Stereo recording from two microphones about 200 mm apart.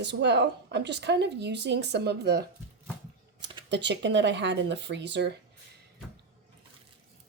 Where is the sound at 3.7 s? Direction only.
60° right (ahead or behind).